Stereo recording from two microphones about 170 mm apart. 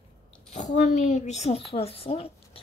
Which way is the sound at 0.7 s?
45° left (ahead or behind).